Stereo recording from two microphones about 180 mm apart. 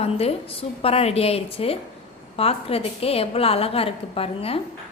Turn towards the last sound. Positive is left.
turn(degrees=30)  # may be behind; listen again after turning